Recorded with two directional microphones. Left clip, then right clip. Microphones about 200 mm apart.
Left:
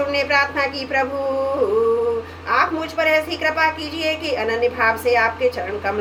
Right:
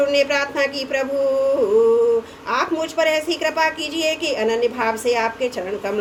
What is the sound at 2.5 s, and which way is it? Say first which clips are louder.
A woman's voice: left 2 dB; 55° right (ahead or behind).